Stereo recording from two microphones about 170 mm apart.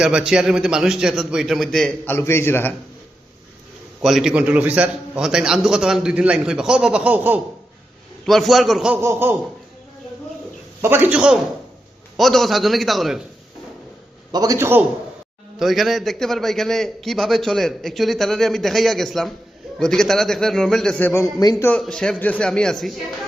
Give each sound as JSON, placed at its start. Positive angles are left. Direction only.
{"t": 0.0, "sound": "a man's voice", "side_deg": -5}
{"t": 2.0, "sound": "a man's voice", "side_deg": 15}
{"t": 4.0, "sound": "a man's voice", "side_deg": 0}
{"t": 8.2, "sound": "a man's voice", "side_deg": 0}
{"t": 9.0, "sound": "a man's voice", "side_deg": -15}
{"t": 10.8, "sound": "a man's voice", "side_deg": -15}
{"t": 14.3, "sound": "a man's voice", "side_deg": -20}
{"t": 15.5, "sound": "a man's voice", "side_deg": 0}
{"t": 21.1, "sound": "a man's voice", "side_deg": 20}
{"t": 21.6, "sound": "a man's voice", "side_deg": 5}